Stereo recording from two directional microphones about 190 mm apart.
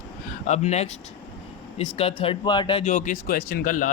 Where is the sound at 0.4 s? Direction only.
35° left (ahead or behind).